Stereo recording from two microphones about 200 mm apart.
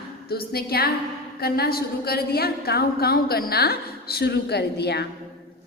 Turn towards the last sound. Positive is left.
turn(degrees=55)  # may be behind; listen again after turning